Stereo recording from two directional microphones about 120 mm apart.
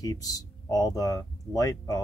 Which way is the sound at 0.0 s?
30° left (ahead or behind).